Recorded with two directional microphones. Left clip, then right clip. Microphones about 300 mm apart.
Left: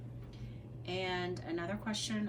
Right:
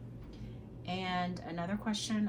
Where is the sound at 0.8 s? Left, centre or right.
Centre.